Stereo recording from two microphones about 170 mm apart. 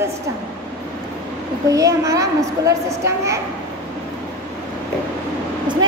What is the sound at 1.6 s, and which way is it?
A woman's voice, 20° right (ahead or behind).